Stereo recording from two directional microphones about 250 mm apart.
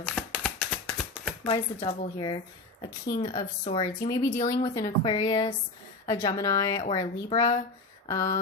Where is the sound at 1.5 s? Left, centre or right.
Centre.